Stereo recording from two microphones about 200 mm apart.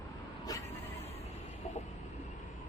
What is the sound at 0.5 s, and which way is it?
Vehicle, 20° left (ahead or behind).